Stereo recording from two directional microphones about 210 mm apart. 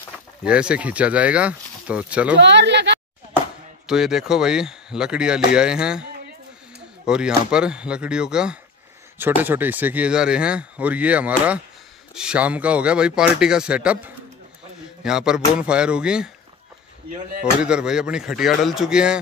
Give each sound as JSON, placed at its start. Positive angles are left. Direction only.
{"t": 0.4, "sound": "speech", "side_deg": -5}
{"t": 2.3, "sound": "speech", "side_deg": -55}
{"t": 3.8, "sound": "speech", "side_deg": 0}
{"t": 7.1, "sound": "speech", "side_deg": -5}
{"t": 17.6, "sound": "speech", "side_deg": -5}